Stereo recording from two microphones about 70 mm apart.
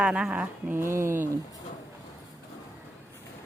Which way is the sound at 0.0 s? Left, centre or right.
Centre.